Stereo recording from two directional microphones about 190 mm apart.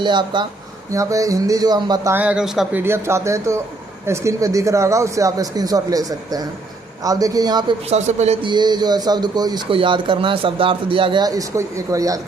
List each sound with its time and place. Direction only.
0.0 s a man's voice: 25° right (ahead or behind)
2.1 s a man's voice: 5° right (ahead or behind)
7.9 s a man's voice: 35° right (ahead or behind); by 12.2 s 20° right (ahead or behind)